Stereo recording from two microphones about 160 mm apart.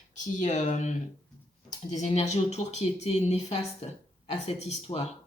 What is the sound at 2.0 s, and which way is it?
Speech, 45° left (ahead or behind).